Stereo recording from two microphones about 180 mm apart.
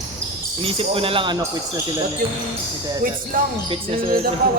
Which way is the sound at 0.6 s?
30° right (ahead or behind).